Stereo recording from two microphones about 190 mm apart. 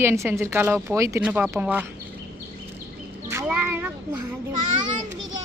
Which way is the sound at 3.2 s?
10° right (ahead or behind).